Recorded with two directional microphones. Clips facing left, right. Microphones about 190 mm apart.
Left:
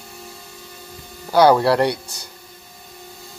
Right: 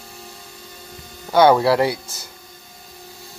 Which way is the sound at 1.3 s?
Centre (ahead or behind).